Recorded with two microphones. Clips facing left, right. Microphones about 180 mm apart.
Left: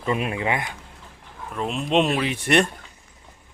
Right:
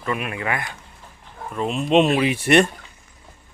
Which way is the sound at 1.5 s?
Centre (ahead or behind).